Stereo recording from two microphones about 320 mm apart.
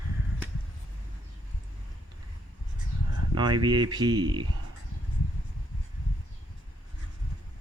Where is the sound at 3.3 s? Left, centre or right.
Centre.